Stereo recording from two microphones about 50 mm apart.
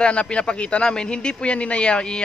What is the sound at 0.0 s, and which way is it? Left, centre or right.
Speech, left.